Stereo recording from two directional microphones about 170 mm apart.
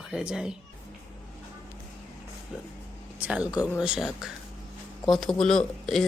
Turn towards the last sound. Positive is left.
turn(degrees=0)  # may be behind; listen again after turning